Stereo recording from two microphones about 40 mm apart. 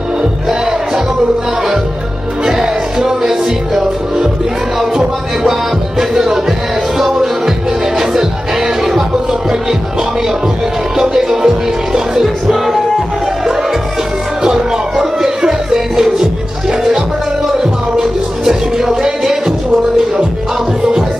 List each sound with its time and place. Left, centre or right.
0.2 s music: centre
2.4 s music: centre
11.0 s music: centre
14.4 s music: centre
17.9 s music: centre